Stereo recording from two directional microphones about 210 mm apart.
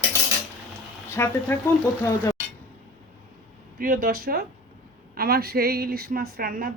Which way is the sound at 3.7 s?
40° right (ahead or behind).